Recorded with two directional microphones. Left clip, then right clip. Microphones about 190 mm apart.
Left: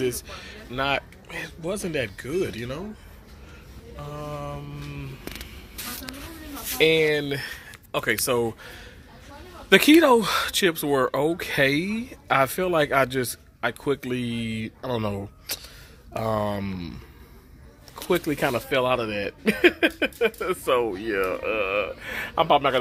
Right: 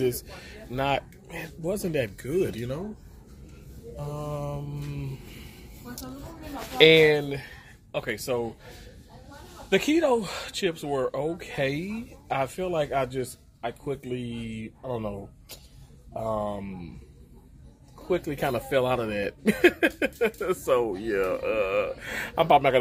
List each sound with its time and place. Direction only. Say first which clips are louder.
0.0 s speech: even; centre (ahead or behind)
4.0 s speech: even; centre (ahead or behind)
6.8 s speech: right 3 dB; 5° left (ahead or behind)
7.9 s speech: left 5 dB; 45° left (ahead or behind)
9.7 s speech: left 7 dB; 50° left (ahead or behind)
18.0 s speech: left 4 dB; 60° left (ahead or behind)
18.7 s speech: even; 15° left (ahead or behind)